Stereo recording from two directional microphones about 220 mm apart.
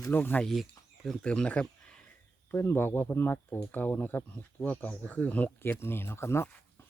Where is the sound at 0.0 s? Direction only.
10° left (ahead or behind).